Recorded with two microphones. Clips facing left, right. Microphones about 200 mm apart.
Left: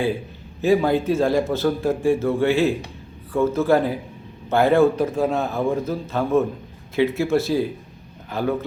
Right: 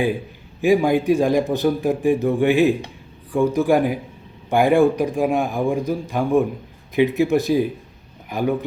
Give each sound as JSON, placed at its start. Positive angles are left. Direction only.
{"t": 0.6, "sound": "a man's voice", "side_deg": -15}